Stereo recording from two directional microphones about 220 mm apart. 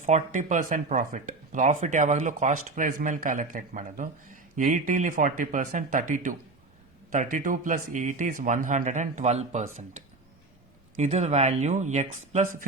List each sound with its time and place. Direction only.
0.0 s speech: 35° right (ahead or behind)
10.9 s speech: 30° right (ahead or behind)